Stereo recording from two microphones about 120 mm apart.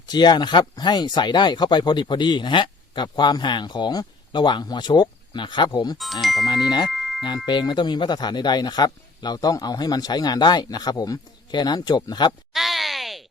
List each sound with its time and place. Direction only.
0.1 s speech: 35° left (ahead or behind)
6.2 s speech: centre (ahead or behind)
6.7 s speech: 35° left (ahead or behind)
6.9 s music: centre (ahead or behind)
7.3 s speech: 40° left (ahead or behind)
12.5 s a sound: centre (ahead or behind)